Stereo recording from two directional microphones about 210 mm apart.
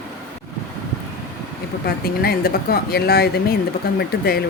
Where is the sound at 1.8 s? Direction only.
45° left (ahead or behind).